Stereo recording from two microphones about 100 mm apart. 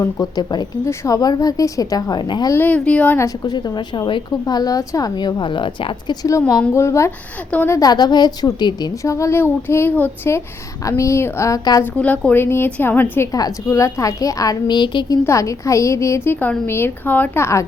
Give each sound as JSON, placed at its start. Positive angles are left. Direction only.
{"t": 0.0, "sound": "a woman's voice", "side_deg": 40}
{"t": 2.5, "sound": "speech", "side_deg": 20}
{"t": 3.2, "sound": "a woman's voice", "side_deg": 40}
{"t": 6.7, "sound": "a woman's voice", "side_deg": 30}
{"t": 7.8, "sound": "a woman's voice", "side_deg": 40}
{"t": 9.0, "sound": "a woman's voice", "side_deg": 30}
{"t": 11.8, "sound": "a woman's voice", "side_deg": 15}
{"t": 13.3, "sound": "a woman's voice", "side_deg": 35}
{"t": 15.3, "sound": "a woman's voice", "side_deg": 30}